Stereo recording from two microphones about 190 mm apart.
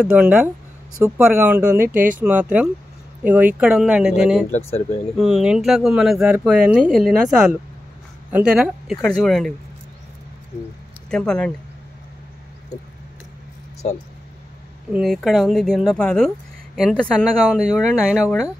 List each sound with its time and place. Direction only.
0.0 s speech: 5° right (ahead or behind)
4.5 s speech: 30° left (ahead or behind)
5.1 s speech: 5° right (ahead or behind)
11.1 s speech: 5° left (ahead or behind)
14.9 s speech: centre (ahead or behind)